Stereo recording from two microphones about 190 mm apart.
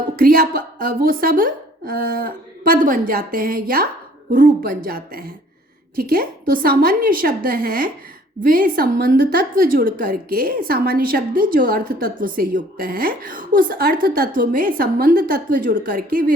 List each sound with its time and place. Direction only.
0.2 s a woman's voice: 50° right (ahead or behind)